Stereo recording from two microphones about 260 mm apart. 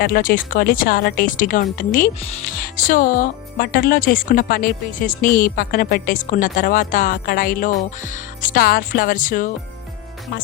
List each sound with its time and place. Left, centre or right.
0.0 s speech: left